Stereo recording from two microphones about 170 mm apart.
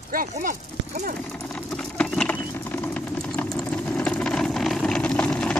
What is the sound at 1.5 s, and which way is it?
Clip-clop, 5° left (ahead or behind).